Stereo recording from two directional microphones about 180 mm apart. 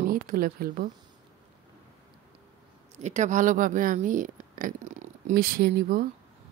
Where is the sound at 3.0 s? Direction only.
40° right (ahead or behind).